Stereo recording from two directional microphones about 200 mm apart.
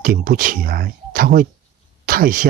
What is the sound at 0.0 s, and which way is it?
Speech, 45° right (ahead or behind).